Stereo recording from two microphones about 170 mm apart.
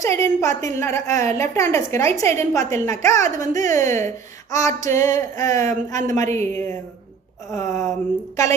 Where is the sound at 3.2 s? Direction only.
45° right (ahead or behind).